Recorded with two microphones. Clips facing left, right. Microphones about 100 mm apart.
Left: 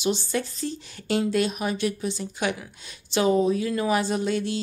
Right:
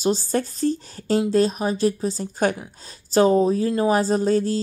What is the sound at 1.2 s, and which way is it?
Speech, 35° right (ahead or behind).